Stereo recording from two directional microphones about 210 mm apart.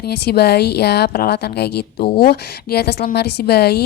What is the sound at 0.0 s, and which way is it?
Speech, 50° left (ahead or behind).